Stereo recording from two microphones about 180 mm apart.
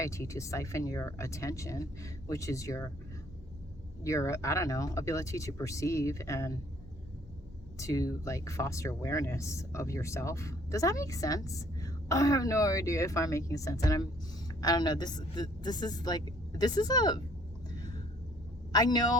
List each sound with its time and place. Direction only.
0.0 s speech: 15° left (ahead or behind)
4.0 s speech: 15° left (ahead or behind)
7.8 s a woman's voice: 20° left (ahead or behind)
18.7 s a woman's voice: 20° left (ahead or behind)